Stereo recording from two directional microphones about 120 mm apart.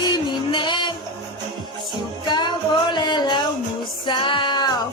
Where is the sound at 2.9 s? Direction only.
40° left (ahead or behind).